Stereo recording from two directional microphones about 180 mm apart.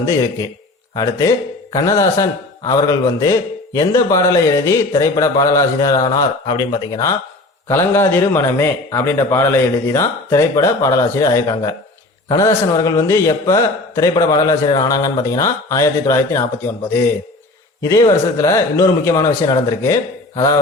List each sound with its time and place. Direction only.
0.0 s a man's voice: 20° left (ahead or behind)
17.8 s a man's voice: 15° left (ahead or behind)